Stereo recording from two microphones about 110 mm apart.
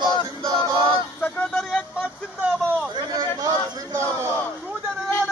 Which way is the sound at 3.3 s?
30° right (ahead or behind).